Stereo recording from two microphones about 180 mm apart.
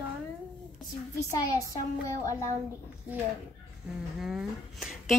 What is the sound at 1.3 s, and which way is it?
Child singing, 20° left (ahead or behind).